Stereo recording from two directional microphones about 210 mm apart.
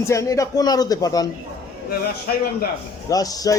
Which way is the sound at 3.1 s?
15° left (ahead or behind).